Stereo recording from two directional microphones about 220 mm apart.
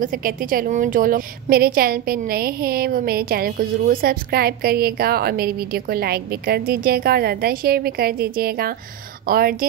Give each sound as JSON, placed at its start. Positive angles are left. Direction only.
{"t": 0.0, "sound": "a woman's voice", "side_deg": -40}